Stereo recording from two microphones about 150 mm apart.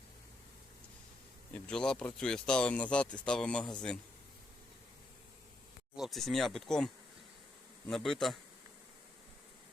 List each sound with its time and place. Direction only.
1.6 s speech: 5° left (ahead or behind)
6.0 s speech: centre (ahead or behind)